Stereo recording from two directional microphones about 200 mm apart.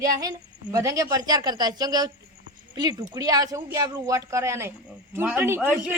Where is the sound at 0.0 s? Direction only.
15° right (ahead or behind).